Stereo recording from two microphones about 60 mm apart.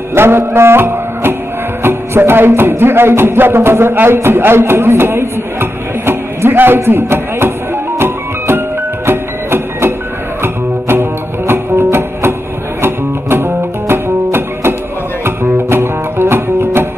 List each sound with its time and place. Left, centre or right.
0.1 s music: right